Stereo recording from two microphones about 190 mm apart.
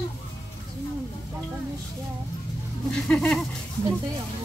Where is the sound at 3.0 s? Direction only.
5° left (ahead or behind).